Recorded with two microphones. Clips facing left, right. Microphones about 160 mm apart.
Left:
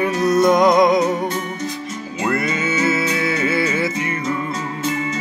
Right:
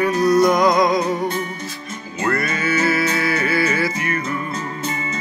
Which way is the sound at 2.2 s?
20° left (ahead or behind).